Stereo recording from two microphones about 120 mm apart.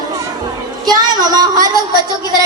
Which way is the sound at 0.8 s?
35° right (ahead or behind).